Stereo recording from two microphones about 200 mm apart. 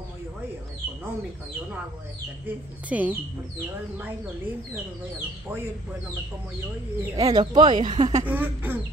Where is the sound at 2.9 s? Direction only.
10° right (ahead or behind).